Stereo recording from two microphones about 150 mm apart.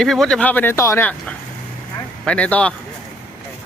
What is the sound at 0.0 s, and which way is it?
Speech, 5° left (ahead or behind).